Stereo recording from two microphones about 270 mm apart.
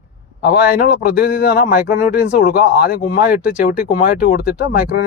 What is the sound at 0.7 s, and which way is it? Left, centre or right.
Speech, left.